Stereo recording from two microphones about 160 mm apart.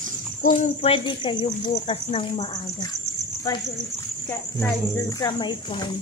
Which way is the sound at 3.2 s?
45° right (ahead or behind).